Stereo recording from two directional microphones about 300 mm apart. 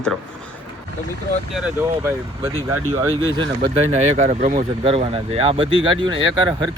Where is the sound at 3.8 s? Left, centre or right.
Right.